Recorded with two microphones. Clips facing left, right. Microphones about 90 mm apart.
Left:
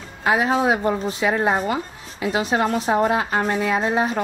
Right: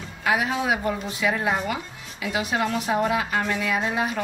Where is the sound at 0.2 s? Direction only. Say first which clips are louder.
Left 5 dB; 30° left (ahead or behind).